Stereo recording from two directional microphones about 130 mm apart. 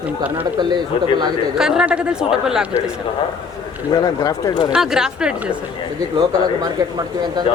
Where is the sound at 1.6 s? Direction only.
5° right (ahead or behind).